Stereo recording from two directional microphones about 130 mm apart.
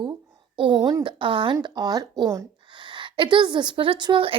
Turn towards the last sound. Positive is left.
turn(degrees=-40)  # may be behind; listen again after turning